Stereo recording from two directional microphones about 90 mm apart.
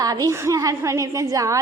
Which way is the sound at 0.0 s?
40° right (ahead or behind).